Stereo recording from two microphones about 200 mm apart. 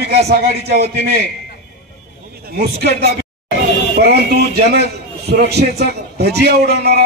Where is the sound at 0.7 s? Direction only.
55° right (ahead or behind).